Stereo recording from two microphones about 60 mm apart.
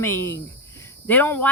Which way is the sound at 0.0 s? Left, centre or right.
Left.